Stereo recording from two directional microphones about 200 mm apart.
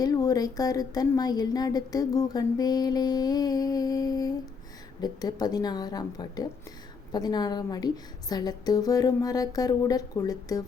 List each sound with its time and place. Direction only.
0.0 s speech: 20° left (ahead or behind)